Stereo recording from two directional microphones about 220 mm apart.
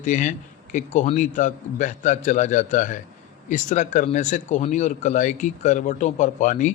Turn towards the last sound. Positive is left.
turn(degrees=35)  # may be behind; listen again after turning